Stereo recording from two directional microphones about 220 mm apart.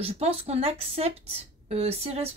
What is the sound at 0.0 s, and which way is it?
A woman's voice, 25° right (ahead or behind).